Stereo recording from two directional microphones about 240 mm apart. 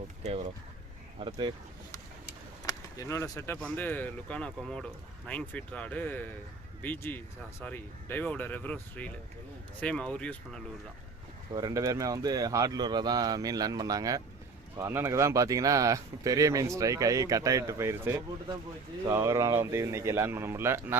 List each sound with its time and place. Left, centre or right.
1.2 s speech: centre
2.6 s speech: centre
11.5 s speech: centre